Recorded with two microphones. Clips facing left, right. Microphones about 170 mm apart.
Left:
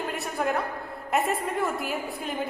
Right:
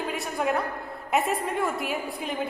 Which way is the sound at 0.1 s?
Centre (ahead or behind).